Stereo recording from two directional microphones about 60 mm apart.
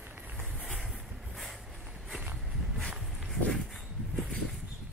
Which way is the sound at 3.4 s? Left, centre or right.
Centre.